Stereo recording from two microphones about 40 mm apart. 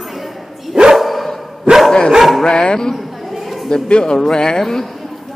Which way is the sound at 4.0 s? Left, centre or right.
Centre.